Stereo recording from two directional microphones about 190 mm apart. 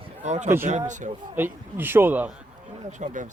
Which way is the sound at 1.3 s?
10° right (ahead or behind).